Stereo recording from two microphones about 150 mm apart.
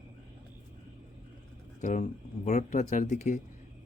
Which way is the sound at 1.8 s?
55° left (ahead or behind).